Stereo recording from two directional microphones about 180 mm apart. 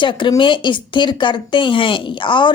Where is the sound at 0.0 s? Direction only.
25° left (ahead or behind).